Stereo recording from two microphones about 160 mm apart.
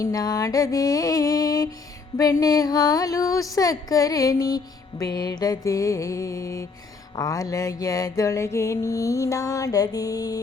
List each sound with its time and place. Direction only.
0.0 s speech: 20° left (ahead or behind)